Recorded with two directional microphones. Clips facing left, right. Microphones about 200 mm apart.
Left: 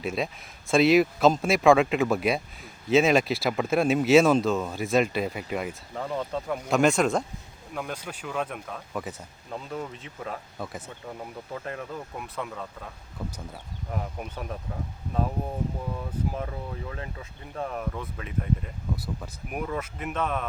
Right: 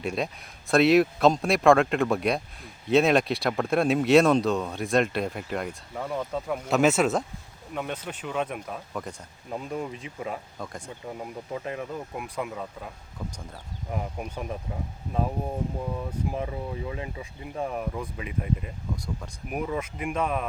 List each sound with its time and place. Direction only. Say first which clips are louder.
0.0 s speech: even; centre (ahead or behind)
8.9 s speech: left 3 dB; 5° left (ahead or behind)
9.5 s speech: right 3 dB; 10° right (ahead or behind)
10.6 s speech: left 1 dB; 5° left (ahead or behind)
10.8 s speech: right 2 dB; 5° right (ahead or behind)
13.9 s speech: right 1 dB; 10° right (ahead or behind)
16.3 s speech: right 2 dB; 5° right (ahead or behind)
18.9 s speech: even; 5° left (ahead or behind)